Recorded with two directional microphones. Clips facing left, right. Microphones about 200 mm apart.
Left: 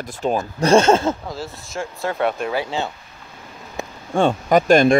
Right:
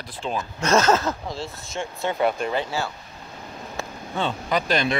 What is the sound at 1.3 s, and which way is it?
Speech, centre (ahead or behind).